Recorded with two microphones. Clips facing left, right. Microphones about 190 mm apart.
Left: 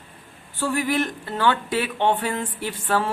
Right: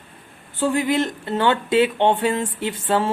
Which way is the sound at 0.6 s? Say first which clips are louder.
Right 3 dB; 20° right (ahead or behind).